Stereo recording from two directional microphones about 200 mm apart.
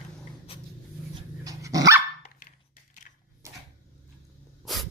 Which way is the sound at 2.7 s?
40° left (ahead or behind).